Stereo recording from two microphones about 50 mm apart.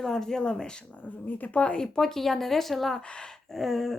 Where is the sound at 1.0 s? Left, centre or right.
Left.